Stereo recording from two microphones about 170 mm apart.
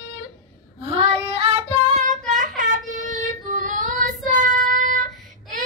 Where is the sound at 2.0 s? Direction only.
50° right (ahead or behind).